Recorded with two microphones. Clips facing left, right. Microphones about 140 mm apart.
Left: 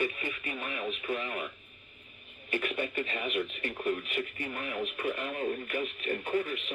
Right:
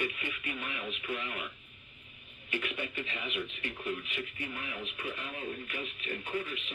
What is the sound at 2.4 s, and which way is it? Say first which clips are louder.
Speech: left 5 dB; 45° left (ahead or behind).